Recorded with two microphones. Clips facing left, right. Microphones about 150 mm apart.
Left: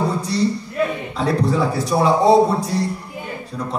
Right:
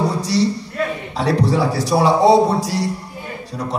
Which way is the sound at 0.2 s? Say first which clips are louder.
Right 2 dB; 80° right.